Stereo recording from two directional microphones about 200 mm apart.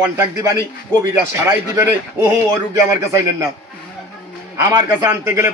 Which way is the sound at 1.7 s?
15° right (ahead or behind).